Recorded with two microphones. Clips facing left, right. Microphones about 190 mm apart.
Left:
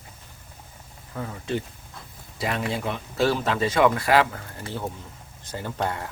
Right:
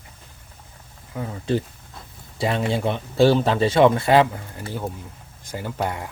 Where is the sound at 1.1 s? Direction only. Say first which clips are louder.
Right 3 dB; 10° right (ahead or behind).